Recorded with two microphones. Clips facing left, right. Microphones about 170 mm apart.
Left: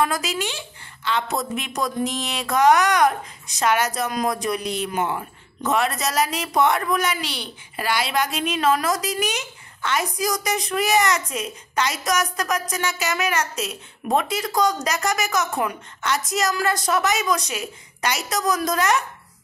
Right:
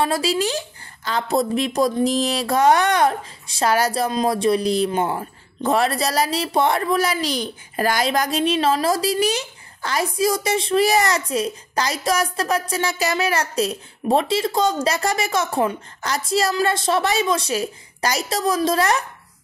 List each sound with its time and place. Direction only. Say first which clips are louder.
0.0 s a woman's voice: right 3 dB; 30° right (ahead or behind)